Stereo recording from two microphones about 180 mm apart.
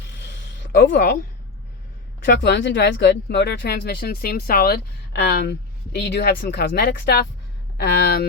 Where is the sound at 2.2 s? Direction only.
75° left (ahead or behind).